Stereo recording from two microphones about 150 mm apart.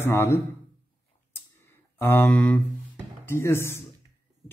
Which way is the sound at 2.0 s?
15° left (ahead or behind).